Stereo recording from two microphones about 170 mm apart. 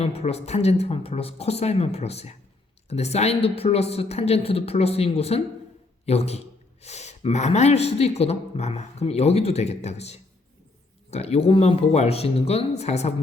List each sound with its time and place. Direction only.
0.0 s speech: 35° left (ahead or behind)